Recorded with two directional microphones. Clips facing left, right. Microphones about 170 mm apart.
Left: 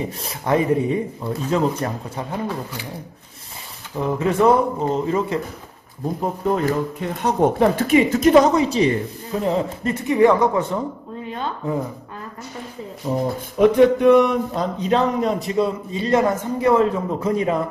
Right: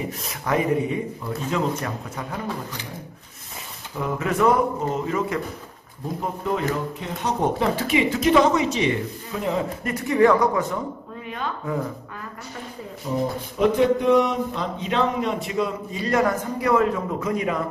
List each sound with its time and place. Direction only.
0.2 s speech: 30° left (ahead or behind)
4.0 s speech: 30° left (ahead or behind)
6.4 s speech: 45° left (ahead or behind); by 10.8 s 30° left (ahead or behind)
11.2 s a sound: 30° left (ahead or behind)
13.1 s speech: 35° left (ahead or behind)
13.6 s music: 60° left (ahead or behind)
14.5 s speech: 40° left (ahead or behind)